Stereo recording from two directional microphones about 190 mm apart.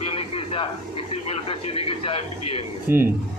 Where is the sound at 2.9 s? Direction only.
10° right (ahead or behind).